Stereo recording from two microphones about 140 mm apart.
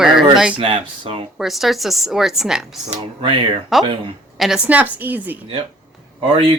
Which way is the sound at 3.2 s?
35° right (ahead or behind).